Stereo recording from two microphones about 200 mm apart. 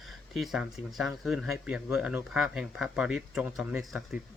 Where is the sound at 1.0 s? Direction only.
Centre (ahead or behind).